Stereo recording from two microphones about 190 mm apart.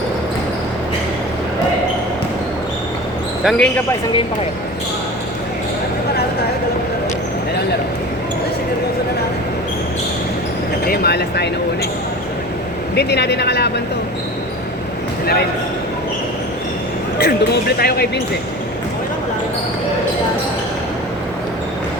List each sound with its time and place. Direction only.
3.4 s speech: 5° left (ahead or behind)
10.8 s speech: 55° left (ahead or behind)
13.0 s speech: 60° left (ahead or behind)
17.2 s speech: 55° left (ahead or behind)